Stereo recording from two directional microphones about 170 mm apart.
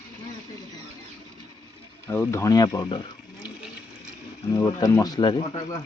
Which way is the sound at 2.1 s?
15° left (ahead or behind).